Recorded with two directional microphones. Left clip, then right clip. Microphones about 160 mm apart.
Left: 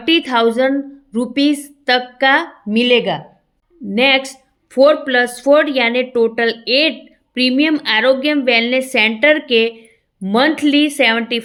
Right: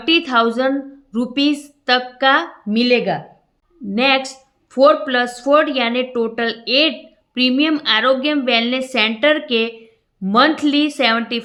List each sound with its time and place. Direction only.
0.0 s a woman's voice: 30° left (ahead or behind)